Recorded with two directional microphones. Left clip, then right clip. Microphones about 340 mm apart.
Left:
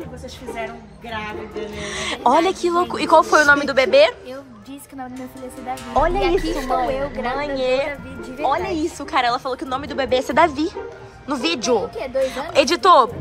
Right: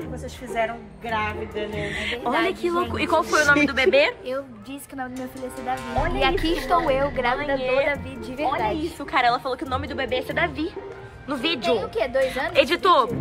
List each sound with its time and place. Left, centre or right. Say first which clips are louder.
0.6 s speech: right 7 dB; centre
5.7 s speech: left 6 dB; centre
12.0 s speech: even; right
12.5 s speech: left 5 dB; centre